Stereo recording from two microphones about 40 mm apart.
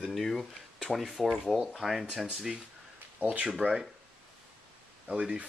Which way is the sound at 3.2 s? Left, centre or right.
Right.